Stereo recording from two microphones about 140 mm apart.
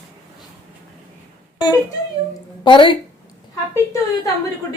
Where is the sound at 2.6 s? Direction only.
35° left (ahead or behind).